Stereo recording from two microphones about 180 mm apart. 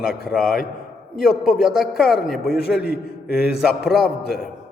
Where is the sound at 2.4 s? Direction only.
60° left (ahead or behind).